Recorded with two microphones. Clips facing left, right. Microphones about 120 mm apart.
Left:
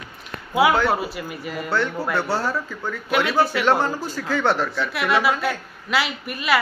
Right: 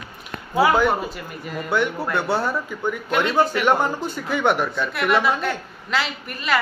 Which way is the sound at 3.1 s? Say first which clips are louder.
Even; 10° left (ahead or behind).